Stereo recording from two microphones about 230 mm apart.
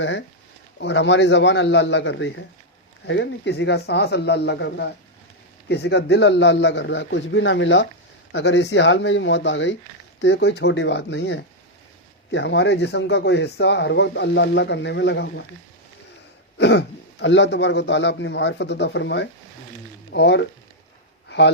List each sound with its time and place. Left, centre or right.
0.0 s speech: left
16.6 s speech: left
21.2 s a sound: left